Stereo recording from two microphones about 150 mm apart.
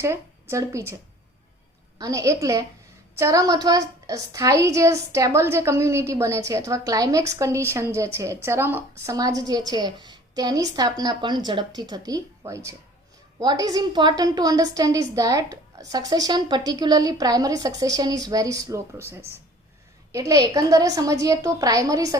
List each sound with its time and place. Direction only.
0.0 s a woman's voice: 20° right (ahead or behind)
2.0 s a woman's voice: 20° right (ahead or behind)